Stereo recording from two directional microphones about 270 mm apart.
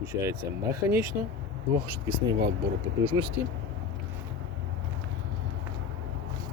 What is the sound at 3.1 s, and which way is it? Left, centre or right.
Speech, centre.